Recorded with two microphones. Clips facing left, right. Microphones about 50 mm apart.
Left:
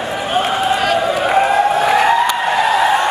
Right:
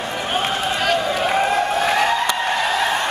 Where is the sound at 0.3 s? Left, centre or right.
Centre.